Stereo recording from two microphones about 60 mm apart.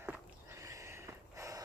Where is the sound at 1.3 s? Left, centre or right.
Right.